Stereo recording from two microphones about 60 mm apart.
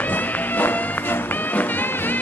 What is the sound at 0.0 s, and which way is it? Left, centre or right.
Music, left.